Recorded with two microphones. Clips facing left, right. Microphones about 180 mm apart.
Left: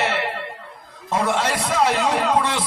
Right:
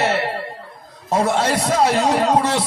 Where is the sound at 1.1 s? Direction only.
40° right (ahead or behind).